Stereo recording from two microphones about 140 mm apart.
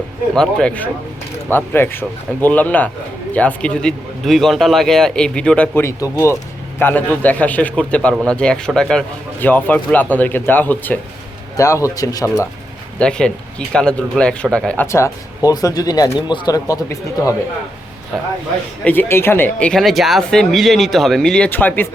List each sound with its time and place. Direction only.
0.3 s a man's voice: 10° left (ahead or behind)
5.8 s a man's voice: 20° left (ahead or behind)
13.0 s a man's voice: 5° left (ahead or behind)
14.8 s speech: 20° left (ahead or behind)
18.9 s speech: 15° left (ahead or behind)